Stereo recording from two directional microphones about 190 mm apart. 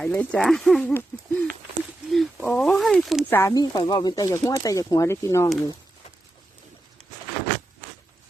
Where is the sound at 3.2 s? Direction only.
15° left (ahead or behind).